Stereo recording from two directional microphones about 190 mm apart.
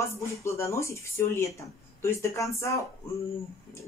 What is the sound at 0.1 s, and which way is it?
Speech, 15° left (ahead or behind).